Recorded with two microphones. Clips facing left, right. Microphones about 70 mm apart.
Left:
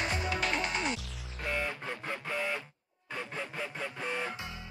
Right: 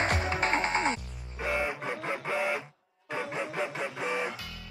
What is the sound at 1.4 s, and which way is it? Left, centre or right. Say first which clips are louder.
Music: right 4 dB; centre.